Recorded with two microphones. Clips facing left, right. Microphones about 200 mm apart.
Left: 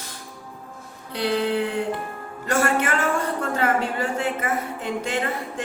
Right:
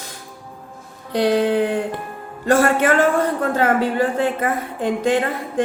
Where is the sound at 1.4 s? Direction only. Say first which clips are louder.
Right 5 dB; 55° right (ahead or behind).